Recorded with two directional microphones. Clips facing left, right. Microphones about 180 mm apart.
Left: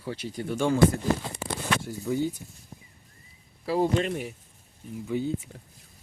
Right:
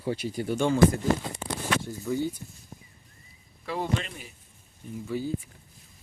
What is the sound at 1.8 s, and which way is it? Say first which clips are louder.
Speech: left 1 dB; 10° left (ahead or behind).